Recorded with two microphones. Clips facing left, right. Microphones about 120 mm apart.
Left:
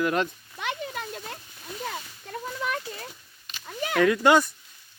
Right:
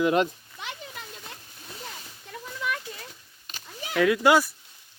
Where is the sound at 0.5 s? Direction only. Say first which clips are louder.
Left 9 dB; 60° left (ahead or behind).